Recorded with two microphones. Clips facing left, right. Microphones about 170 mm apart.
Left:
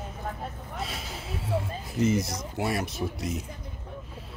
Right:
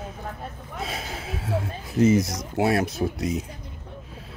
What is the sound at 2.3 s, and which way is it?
Speech, 90° right.